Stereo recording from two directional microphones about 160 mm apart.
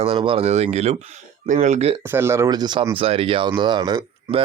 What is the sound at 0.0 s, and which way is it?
Speech, 35° right (ahead or behind).